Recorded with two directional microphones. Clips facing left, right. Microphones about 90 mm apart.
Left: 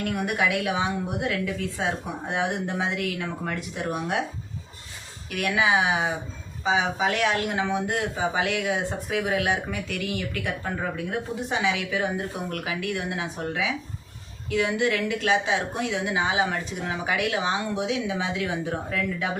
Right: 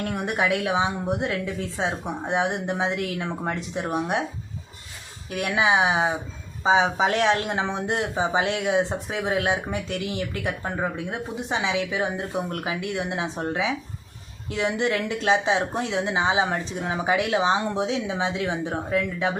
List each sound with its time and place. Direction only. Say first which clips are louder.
0.0 s speech: even; 25° right (ahead or behind)
5.3 s speech: right 1 dB; 25° right (ahead or behind)